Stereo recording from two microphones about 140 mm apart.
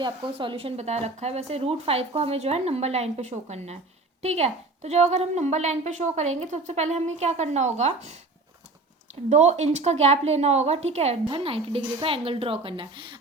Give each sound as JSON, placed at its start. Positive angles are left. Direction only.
{"t": 0.0, "sound": "a woman's voice", "side_deg": -35}
{"t": 9.3, "sound": "a woman's voice", "side_deg": -55}